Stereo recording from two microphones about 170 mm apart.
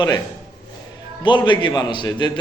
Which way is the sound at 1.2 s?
25° left (ahead or behind).